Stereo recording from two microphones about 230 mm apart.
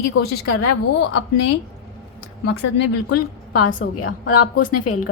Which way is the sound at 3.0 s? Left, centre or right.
Left.